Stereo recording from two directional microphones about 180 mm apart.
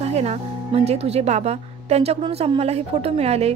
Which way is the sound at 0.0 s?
35° right (ahead or behind).